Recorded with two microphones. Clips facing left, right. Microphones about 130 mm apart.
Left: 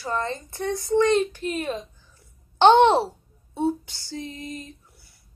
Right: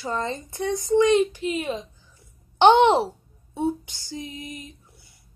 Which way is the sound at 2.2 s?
15° right (ahead or behind).